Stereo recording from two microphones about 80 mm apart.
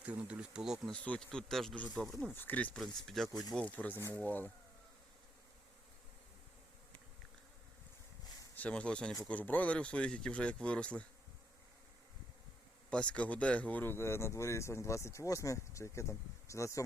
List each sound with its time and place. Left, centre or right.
0.0 s speech: centre
1.0 s speech: centre
1.7 s speech: centre
2.7 s speech: centre
3.5 s speech: centre
8.5 s speech: centre
12.9 s speech: centre; by 16.8 s left